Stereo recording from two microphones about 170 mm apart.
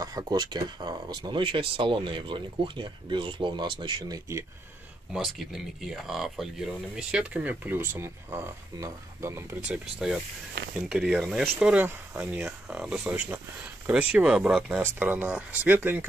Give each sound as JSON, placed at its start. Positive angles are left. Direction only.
{"t": 0.0, "sound": "speech", "side_deg": -20}
{"t": 5.1, "sound": "speech", "side_deg": 0}